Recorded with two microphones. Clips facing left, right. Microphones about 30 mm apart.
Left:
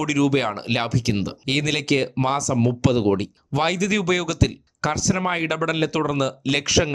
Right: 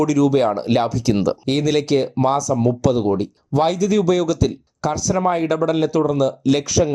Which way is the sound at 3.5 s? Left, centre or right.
Left.